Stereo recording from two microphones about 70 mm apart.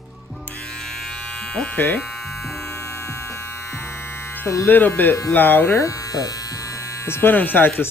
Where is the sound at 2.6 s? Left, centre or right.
Left.